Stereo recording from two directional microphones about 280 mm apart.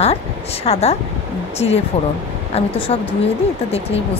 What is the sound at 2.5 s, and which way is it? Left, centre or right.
Speech, left.